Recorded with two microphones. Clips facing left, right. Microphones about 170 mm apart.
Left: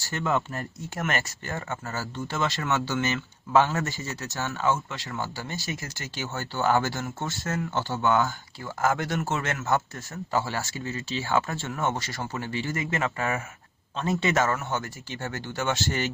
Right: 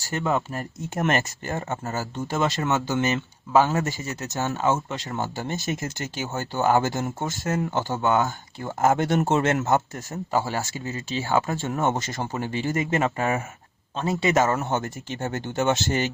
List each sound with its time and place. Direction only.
0.0 s speech: 20° right (ahead or behind)